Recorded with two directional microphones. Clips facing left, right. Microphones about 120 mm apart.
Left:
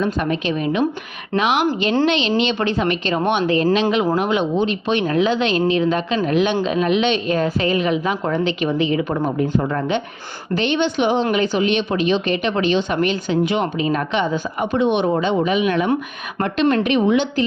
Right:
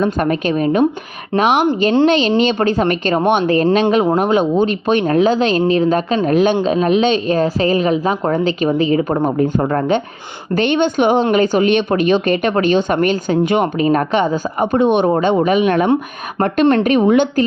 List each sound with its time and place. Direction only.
0.0 s a woman's voice: 50° right (ahead or behind)
9.4 s a woman's voice: 50° right (ahead or behind)